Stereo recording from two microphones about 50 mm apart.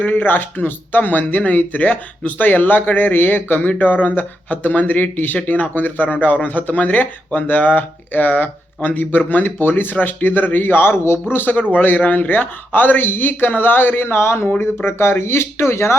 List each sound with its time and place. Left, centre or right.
0.0 s speech: left
11.3 s speech: left